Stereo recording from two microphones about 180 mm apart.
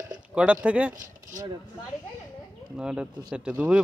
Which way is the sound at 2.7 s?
5° right (ahead or behind).